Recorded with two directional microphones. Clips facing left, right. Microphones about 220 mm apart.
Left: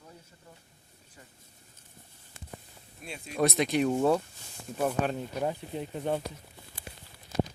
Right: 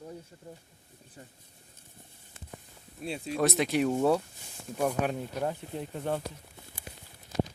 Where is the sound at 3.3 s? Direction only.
Centre (ahead or behind).